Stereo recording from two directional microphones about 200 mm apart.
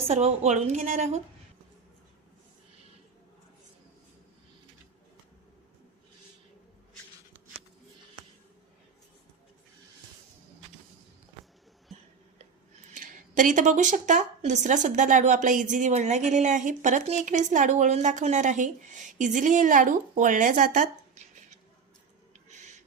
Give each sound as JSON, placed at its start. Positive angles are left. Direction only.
{"t": 0.1, "sound": "speech", "side_deg": -35}
{"t": 12.9, "sound": "speech", "side_deg": -40}
{"t": 22.3, "sound": "a sound", "side_deg": -35}